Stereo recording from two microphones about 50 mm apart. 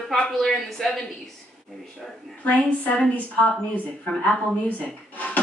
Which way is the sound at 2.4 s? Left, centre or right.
Left.